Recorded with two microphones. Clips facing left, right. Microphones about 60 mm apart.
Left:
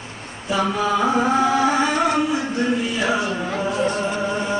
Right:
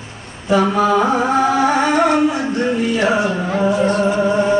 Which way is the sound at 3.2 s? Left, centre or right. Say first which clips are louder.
Right 5 dB; centre.